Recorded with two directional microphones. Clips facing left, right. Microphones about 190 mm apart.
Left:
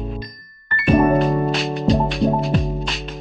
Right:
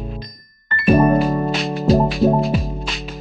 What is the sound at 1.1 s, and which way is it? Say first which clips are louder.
Music: even; centre (ahead or behind).